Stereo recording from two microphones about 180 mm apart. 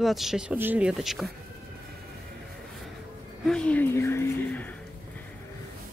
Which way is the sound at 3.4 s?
5° left (ahead or behind).